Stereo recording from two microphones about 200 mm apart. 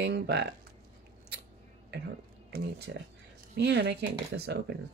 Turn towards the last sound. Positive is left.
turn(degrees=-55)  # may be behind; listen again after turning